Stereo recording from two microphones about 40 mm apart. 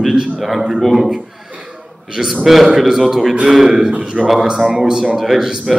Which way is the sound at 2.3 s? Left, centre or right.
Centre.